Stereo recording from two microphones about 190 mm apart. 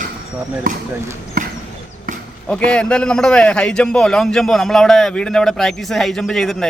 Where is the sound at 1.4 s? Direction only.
50° right (ahead or behind).